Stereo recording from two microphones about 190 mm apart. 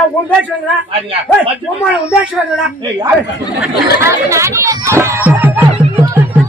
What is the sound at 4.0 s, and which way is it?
Speech, 15° right (ahead or behind).